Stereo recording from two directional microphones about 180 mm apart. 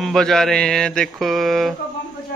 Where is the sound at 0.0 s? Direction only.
Centre (ahead or behind).